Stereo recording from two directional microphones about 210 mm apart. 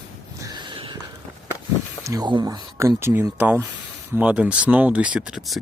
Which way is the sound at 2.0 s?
20° right (ahead or behind).